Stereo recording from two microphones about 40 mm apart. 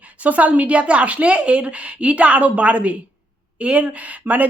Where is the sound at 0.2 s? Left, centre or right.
Right.